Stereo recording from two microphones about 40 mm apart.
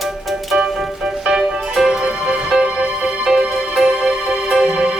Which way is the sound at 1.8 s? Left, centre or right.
Centre.